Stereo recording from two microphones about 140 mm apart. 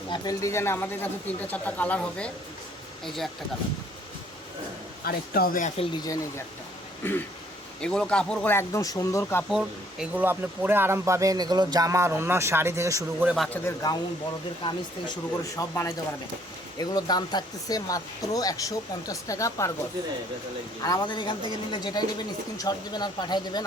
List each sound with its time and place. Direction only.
0.1 s speech: 25° left (ahead or behind); by 2.3 s 10° left (ahead or behind)
5.0 s a man's voice: 90° left
5.7 s a woman's voice: 40° left (ahead or behind)
6.0 s speech: 25° left (ahead or behind)
9.5 s speech: 5° right (ahead or behind)
13.2 s speech: centre (ahead or behind)
13.5 s speech: 20° left (ahead or behind)
15.5 s speech: 20° left (ahead or behind)
20.8 s a woman's voice: 30° left (ahead or behind)